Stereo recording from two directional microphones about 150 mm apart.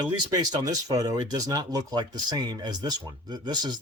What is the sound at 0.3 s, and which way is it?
Speech, 25° right (ahead or behind).